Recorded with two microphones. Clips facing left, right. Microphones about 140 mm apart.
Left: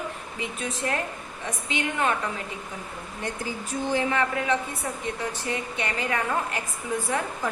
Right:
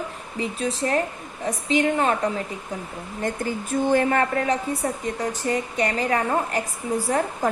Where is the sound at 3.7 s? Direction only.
50° right (ahead or behind).